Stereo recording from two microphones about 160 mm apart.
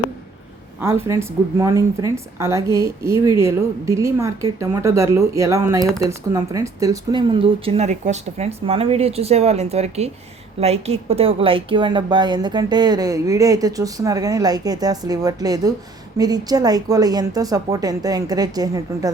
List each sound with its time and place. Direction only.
0.8 s a woman's voice: 15° right (ahead or behind)